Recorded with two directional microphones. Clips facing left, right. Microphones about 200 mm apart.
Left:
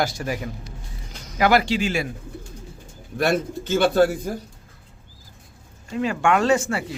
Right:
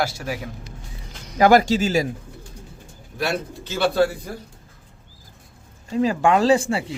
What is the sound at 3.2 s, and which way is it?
Speech, 50° left (ahead or behind).